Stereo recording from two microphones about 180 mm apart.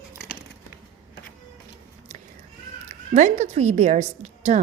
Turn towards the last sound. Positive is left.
turn(degrees=-40)  # may be behind; listen again after turning